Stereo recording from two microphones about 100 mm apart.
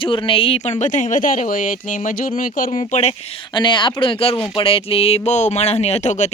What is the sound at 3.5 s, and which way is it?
Speech, 50° left (ahead or behind).